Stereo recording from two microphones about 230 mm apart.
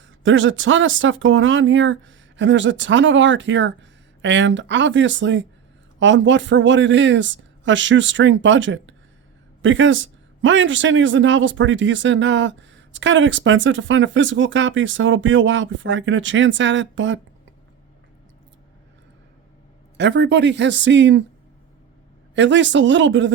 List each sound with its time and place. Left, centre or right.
0.2 s a man's voice: right
20.0 s a man's voice: right
22.4 s a man's voice: right